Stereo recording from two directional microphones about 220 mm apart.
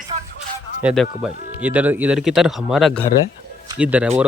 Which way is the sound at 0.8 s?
Centre (ahead or behind).